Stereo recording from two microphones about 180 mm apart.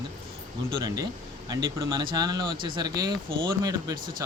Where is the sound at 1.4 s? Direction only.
20° right (ahead or behind).